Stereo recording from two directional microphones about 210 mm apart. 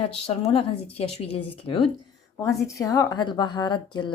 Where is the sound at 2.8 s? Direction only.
15° left (ahead or behind).